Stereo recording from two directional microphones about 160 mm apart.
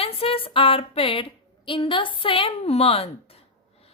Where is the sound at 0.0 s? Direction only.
35° left (ahead or behind).